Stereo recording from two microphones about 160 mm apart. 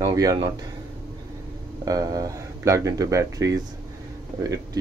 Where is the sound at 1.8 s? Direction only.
25° right (ahead or behind).